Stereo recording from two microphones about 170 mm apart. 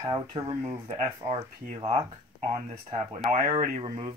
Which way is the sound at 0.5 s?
15° right (ahead or behind).